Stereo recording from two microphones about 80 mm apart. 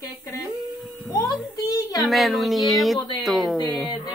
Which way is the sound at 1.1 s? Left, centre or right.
Left.